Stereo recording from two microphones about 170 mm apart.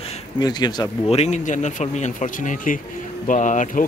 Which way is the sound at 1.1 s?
40° left (ahead or behind).